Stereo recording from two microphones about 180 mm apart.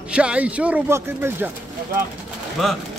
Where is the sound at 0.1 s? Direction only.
5° right (ahead or behind).